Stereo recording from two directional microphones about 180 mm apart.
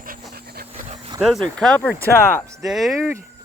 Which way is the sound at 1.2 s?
Centre (ahead or behind).